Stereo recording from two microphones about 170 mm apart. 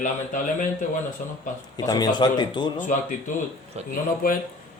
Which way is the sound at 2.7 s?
50° left (ahead or behind).